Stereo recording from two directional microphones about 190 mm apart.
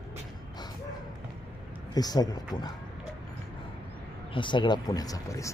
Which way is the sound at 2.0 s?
20° left (ahead or behind).